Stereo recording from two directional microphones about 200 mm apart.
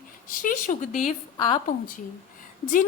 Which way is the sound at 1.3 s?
20° left (ahead or behind).